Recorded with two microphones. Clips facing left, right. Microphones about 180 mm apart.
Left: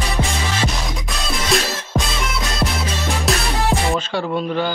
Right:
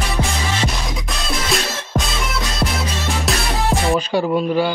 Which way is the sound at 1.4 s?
Centre (ahead or behind).